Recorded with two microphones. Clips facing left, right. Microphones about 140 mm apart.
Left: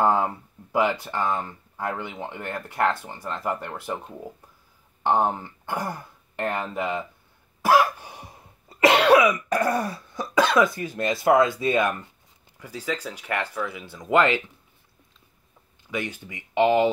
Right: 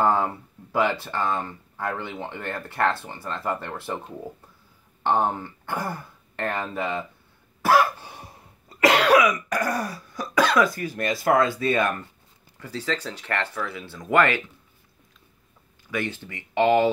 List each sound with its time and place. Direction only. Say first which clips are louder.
0.0 s speech: even; 15° left (ahead or behind)
5.0 s speech: left 1 dB; 15° left (ahead or behind)
7.6 s cough: even; 15° left (ahead or behind)
12.5 s speech: right 1 dB; 10° left (ahead or behind)
15.9 s speech: right 1 dB; 15° left (ahead or behind)